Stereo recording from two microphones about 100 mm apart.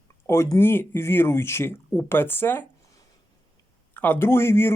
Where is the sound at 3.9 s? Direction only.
20° left (ahead or behind).